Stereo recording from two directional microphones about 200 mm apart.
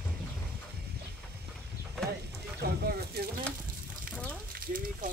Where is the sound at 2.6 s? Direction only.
50° right (ahead or behind).